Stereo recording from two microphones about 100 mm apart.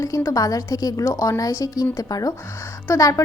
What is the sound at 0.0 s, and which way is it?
A woman's voice, 35° left (ahead or behind).